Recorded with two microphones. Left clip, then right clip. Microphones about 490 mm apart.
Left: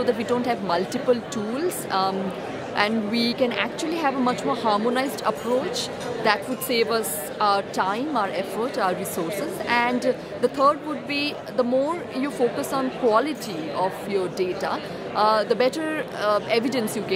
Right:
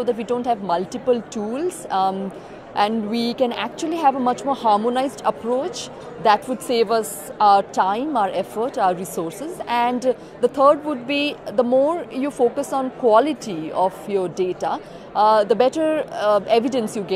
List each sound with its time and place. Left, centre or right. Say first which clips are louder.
0.0 s a woman's voice: right 1 dB; centre